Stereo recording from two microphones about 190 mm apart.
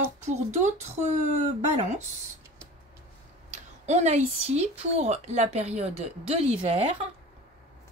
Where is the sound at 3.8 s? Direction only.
35° right (ahead or behind).